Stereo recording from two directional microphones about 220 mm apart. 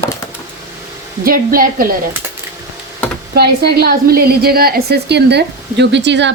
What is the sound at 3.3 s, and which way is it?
A woman's voice, 45° right (ahead or behind).